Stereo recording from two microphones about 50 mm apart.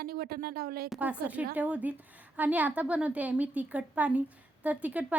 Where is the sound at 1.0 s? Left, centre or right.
Right.